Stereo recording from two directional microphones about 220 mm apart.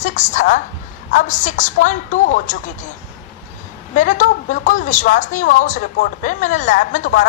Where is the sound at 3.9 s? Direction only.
35° left (ahead or behind).